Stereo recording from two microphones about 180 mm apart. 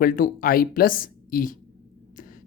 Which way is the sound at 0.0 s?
50° left (ahead or behind).